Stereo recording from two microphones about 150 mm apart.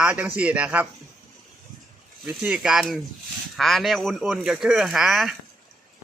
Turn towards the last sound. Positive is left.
turn(degrees=0)  # may be behind; listen again after turning